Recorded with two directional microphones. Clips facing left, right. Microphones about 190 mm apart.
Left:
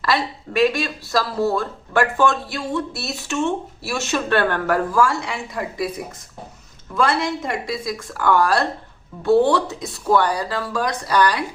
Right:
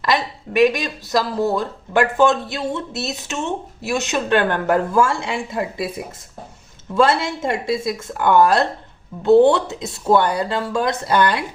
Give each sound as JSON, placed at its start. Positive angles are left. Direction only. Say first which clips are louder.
{"t": 0.0, "sound": "speech", "louder": "right 1 dB", "side_deg": -15}